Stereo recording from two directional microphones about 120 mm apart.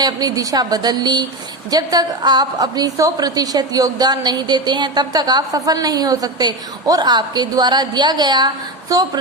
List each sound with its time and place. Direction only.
0.0 s a woman's voice: 35° right (ahead or behind)